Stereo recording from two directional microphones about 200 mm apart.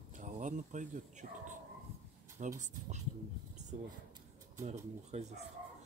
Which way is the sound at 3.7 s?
35° right (ahead or behind).